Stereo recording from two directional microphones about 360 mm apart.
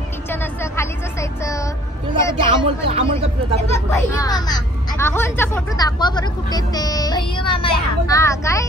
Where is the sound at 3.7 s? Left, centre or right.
Centre.